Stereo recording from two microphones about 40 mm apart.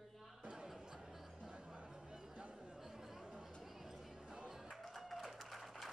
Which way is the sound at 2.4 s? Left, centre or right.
Right.